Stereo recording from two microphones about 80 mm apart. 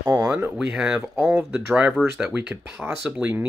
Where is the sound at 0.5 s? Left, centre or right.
Centre.